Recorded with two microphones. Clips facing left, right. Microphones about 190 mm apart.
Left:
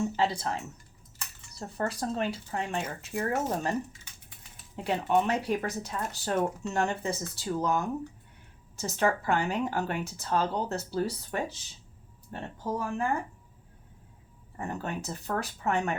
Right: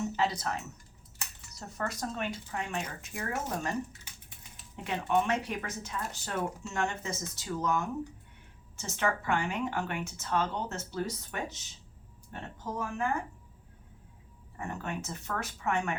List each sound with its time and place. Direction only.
0.2 s speech: 30° left (ahead or behind)
4.8 s speech: 35° left (ahead or behind)
14.5 s speech: 35° left (ahead or behind)